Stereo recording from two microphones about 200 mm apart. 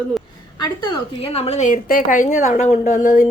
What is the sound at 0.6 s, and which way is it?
A woman's voice, 20° left (ahead or behind).